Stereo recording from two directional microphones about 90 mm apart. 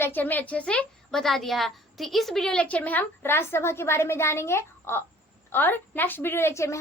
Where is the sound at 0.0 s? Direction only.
20° left (ahead or behind).